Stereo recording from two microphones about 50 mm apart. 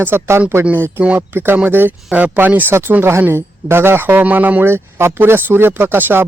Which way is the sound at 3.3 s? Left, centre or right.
Right.